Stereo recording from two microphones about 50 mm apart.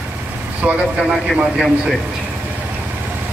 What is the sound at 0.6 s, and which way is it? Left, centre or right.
Speech, right.